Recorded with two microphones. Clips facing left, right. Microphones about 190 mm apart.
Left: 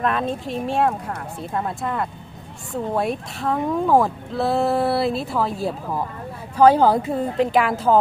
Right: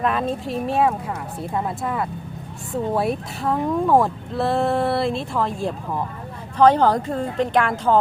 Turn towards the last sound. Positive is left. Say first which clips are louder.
# left 1 dB
turn(degrees=5)  # may be behind; listen again after turning